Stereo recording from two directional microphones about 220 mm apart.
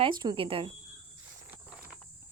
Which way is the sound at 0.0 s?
20° right (ahead or behind).